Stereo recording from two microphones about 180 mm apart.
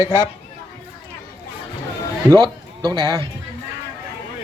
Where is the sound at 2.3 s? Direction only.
20° right (ahead or behind).